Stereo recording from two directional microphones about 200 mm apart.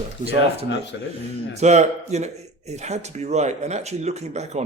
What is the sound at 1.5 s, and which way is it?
Speech, 35° right (ahead or behind).